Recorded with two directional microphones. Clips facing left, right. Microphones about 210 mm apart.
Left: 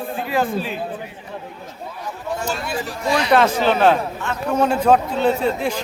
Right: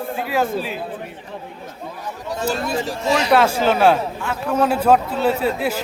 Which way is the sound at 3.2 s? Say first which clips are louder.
Left 1 dB; 5° right (ahead or behind).